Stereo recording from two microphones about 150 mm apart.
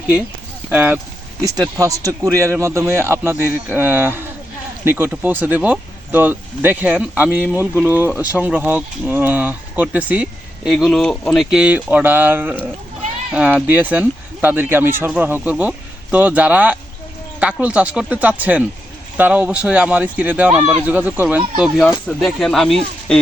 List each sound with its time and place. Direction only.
0.7 s speech: 10° right (ahead or behind)
1.4 s speech: 25° right (ahead or behind); by 11.4 s 5° left (ahead or behind)
11.4 s speech: 5° right (ahead or behind)